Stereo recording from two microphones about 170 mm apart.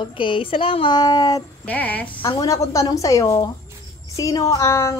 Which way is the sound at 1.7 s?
10° left (ahead or behind).